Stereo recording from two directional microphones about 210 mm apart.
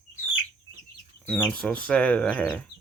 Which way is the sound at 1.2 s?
5° left (ahead or behind).